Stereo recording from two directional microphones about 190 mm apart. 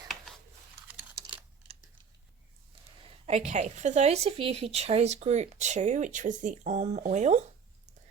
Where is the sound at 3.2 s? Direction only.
35° right (ahead or behind).